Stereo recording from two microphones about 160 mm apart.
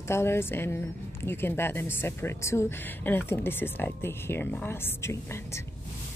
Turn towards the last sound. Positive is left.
turn(degrees=15)  # may be behind; listen again after turning